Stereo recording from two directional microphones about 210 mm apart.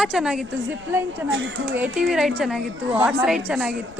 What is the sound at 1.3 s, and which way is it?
Speech, 60° right (ahead or behind).